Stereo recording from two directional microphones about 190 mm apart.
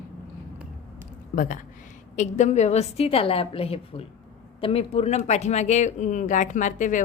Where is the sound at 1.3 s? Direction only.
45° left (ahead or behind).